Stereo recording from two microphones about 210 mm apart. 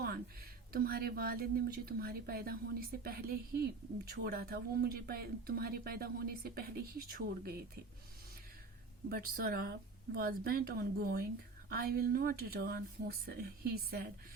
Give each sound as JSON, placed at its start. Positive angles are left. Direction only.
{"t": 0.7, "sound": "speech", "side_deg": -45}
{"t": 9.0, "sound": "speech", "side_deg": -45}